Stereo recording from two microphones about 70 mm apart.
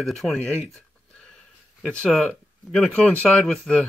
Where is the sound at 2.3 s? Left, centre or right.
Centre.